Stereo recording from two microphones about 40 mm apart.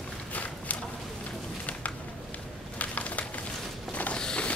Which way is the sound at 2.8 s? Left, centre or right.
Left.